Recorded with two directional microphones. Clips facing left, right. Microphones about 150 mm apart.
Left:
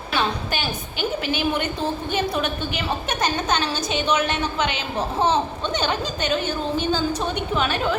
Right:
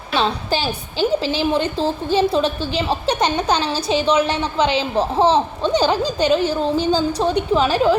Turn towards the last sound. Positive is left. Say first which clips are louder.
# right 7 dB
turn(degrees=-30)  # may be behind; listen again after turning